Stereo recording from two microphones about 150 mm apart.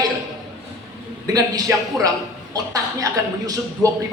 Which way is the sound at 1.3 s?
25° right (ahead or behind).